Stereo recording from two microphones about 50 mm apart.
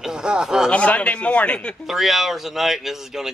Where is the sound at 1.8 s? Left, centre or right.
Centre.